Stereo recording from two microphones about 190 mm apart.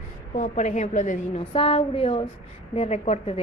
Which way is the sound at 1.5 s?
30° left (ahead or behind).